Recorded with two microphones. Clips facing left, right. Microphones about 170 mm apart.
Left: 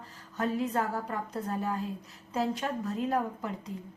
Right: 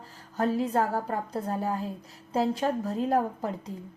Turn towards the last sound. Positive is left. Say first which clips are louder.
# right 4 dB
turn(degrees=-35)  # may be behind; listen again after turning